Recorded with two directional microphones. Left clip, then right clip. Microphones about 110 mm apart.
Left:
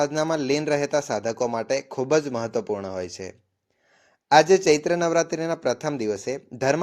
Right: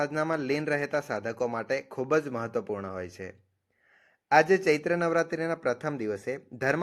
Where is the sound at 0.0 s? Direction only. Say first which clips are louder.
Left 5 dB; 25° left (ahead or behind).